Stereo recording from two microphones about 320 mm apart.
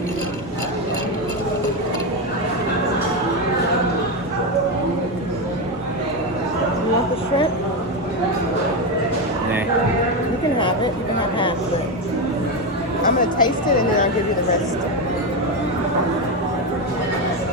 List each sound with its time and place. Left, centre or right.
13.1 s chatter: left